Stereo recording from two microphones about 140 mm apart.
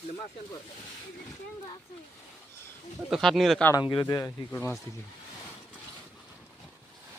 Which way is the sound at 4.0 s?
20° left (ahead or behind).